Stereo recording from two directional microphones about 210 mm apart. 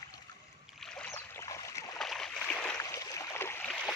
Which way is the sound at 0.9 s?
10° left (ahead or behind).